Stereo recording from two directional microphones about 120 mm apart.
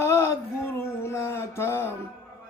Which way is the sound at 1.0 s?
25° left (ahead or behind).